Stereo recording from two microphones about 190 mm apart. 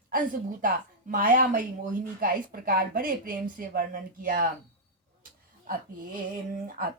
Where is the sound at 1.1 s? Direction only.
45° right (ahead or behind).